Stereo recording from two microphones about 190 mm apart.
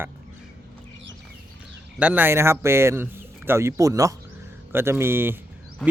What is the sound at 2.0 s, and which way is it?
Speech, 10° right (ahead or behind).